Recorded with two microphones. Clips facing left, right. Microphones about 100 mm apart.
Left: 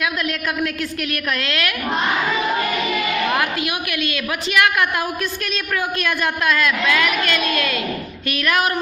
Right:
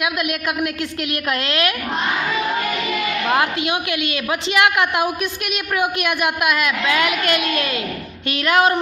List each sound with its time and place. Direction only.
0.0 s a woman's voice: 20° right (ahead or behind)
3.2 s a woman's voice: 25° right (ahead or behind)